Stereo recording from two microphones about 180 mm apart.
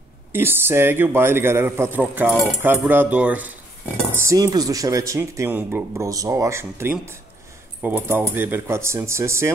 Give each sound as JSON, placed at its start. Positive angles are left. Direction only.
{"t": 0.3, "sound": "speech", "side_deg": -10}